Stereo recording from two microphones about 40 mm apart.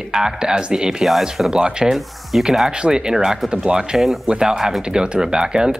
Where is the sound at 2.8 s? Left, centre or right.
Right.